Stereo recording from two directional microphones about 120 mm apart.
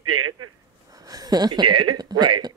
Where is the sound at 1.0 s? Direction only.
30° right (ahead or behind).